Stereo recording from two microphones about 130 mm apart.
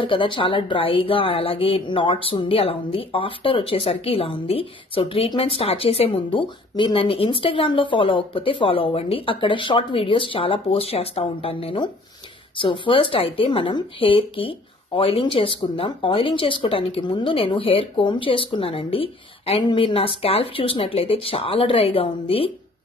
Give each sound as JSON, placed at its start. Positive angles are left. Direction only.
{"t": 0.0, "sound": "speech", "side_deg": 40}